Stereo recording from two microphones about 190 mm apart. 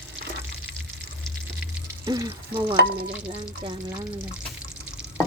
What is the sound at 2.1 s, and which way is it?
Speech, 20° right (ahead or behind).